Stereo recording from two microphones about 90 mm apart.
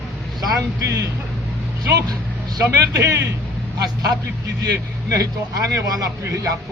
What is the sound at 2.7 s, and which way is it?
Speech, 35° right (ahead or behind).